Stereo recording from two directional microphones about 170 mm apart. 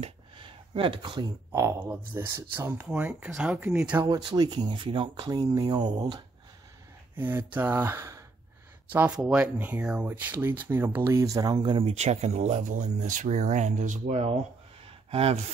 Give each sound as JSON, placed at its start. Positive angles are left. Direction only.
{"t": 0.0, "sound": "speech", "side_deg": -30}
{"t": 4.1, "sound": "speech", "side_deg": -25}
{"t": 7.2, "sound": "speech", "side_deg": -10}
{"t": 11.9, "sound": "speech", "side_deg": -40}